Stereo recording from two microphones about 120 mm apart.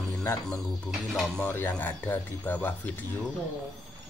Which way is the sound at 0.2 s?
20° left (ahead or behind).